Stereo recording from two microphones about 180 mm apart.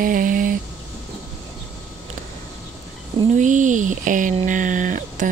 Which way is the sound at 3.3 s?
45° right (ahead or behind).